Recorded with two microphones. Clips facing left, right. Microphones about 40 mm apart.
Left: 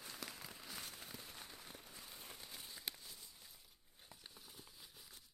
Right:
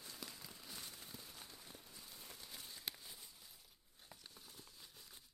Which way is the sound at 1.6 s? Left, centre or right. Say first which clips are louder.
Left 2 dB; left.